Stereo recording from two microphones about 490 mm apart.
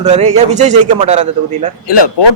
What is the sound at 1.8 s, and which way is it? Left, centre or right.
Speech, left.